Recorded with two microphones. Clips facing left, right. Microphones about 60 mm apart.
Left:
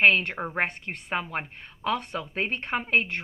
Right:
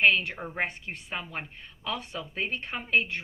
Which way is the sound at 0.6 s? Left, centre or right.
Left.